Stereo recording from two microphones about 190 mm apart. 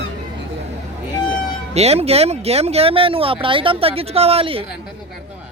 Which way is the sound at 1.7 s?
35° right (ahead or behind).